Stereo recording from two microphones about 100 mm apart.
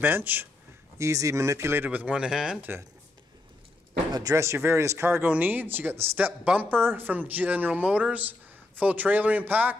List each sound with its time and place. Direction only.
0.0 s speech: 20° right (ahead or behind)
0.9 s speech: 30° right (ahead or behind); by 2.6 s 5° right (ahead or behind)
4.1 s speech: 35° right (ahead or behind); by 9.8 s 15° right (ahead or behind)